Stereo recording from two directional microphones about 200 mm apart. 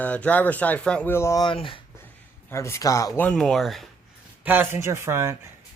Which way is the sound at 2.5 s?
15° left (ahead or behind).